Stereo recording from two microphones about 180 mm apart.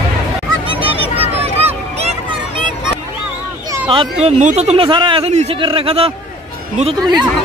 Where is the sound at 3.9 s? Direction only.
30° right (ahead or behind).